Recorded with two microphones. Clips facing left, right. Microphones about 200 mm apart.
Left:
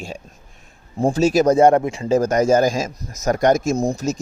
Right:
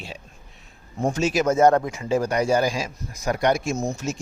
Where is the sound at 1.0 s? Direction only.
35° left (ahead or behind).